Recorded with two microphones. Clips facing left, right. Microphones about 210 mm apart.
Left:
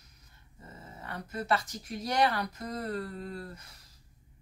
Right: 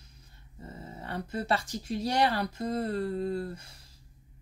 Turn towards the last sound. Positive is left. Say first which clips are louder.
# right 9 dB
turn(degrees=-30)  # may be behind; listen again after turning